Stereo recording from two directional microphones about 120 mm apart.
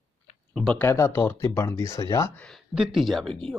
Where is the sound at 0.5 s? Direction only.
10° left (ahead or behind); by 2.3 s 25° left (ahead or behind).